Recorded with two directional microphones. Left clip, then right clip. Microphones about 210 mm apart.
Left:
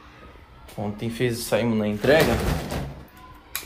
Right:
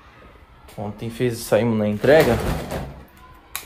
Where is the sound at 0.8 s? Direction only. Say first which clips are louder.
Right 1 dB; 30° right (ahead or behind).